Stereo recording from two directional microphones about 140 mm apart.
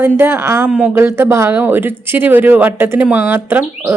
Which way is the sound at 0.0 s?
15° right (ahead or behind).